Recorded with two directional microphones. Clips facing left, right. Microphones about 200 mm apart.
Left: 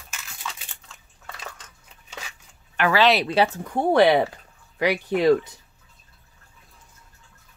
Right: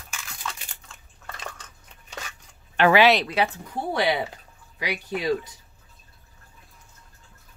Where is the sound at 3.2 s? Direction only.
35° left (ahead or behind); by 5.4 s 60° left (ahead or behind).